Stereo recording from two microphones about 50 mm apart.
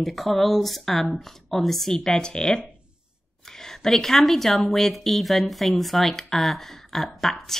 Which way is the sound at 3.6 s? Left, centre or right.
Centre.